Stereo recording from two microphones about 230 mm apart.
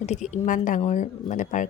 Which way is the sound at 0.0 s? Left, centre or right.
Left.